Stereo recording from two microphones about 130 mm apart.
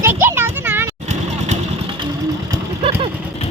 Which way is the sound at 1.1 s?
60° right (ahead or behind).